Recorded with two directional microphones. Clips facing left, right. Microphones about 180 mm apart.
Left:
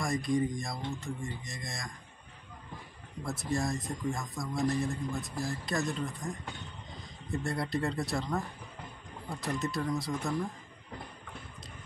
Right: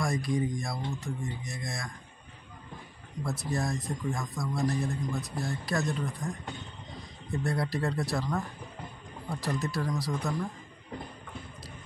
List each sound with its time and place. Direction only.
0.0 s a man's voice: centre (ahead or behind)
3.3 s a man's voice: centre (ahead or behind)